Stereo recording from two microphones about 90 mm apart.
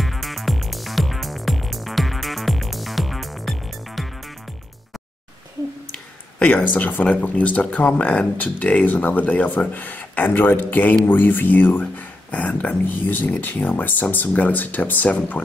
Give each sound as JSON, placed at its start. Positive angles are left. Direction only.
{"t": 0.0, "sound": "music", "side_deg": 0}
{"t": 6.4, "sound": "speech", "side_deg": 20}